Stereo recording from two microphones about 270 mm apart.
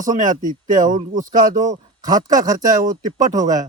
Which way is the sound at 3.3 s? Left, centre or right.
Centre.